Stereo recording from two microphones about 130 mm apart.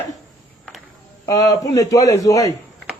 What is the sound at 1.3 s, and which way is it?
Speech, 25° left (ahead or behind).